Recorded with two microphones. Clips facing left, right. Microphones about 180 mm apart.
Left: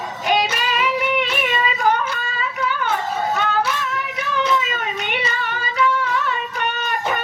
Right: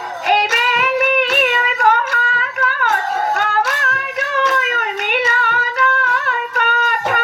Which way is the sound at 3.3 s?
70° right (ahead or behind).